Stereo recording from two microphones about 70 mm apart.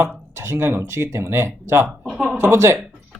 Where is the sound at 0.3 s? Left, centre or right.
Right.